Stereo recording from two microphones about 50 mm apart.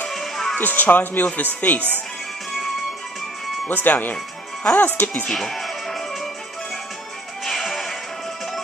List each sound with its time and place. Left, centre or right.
0.1 s music: centre
0.6 s speech: left
3.6 s speech: left
5.3 s music: centre
7.4 s music: centre